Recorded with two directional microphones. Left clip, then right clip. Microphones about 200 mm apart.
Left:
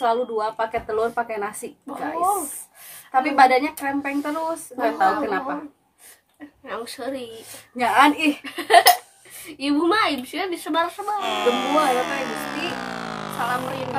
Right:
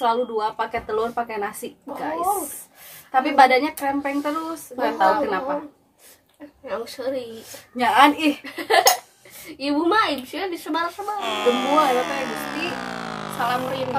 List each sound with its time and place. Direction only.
0.0 s speech: centre (ahead or behind)
6.6 s a woman's voice: 20° left (ahead or behind)
7.7 s speech: centre (ahead or behind)
8.5 s a woman's voice: 25° left (ahead or behind)
11.1 s speech: centre (ahead or behind)